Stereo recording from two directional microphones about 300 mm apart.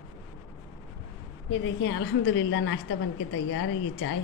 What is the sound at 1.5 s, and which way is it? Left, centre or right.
A woman's voice, left.